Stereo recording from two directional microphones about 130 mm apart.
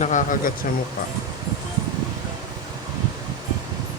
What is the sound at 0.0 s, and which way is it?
Speech, 70° left (ahead or behind).